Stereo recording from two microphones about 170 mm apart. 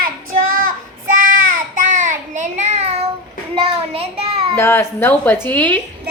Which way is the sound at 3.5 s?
35° right (ahead or behind).